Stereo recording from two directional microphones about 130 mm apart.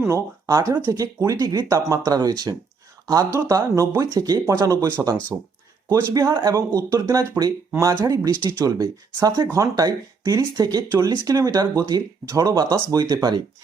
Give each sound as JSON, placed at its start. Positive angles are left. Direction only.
{"t": 0.1, "sound": "speech", "side_deg": -25}